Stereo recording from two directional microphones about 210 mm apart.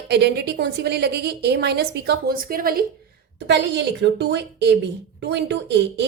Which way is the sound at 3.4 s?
55° right (ahead or behind).